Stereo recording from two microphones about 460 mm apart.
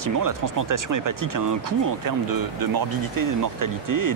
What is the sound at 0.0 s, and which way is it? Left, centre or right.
Speech, right.